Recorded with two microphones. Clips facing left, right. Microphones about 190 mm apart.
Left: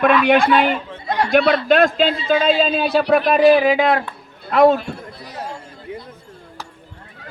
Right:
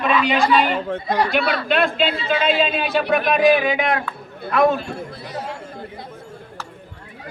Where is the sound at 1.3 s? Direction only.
50° left (ahead or behind); by 4.1 s 30° left (ahead or behind).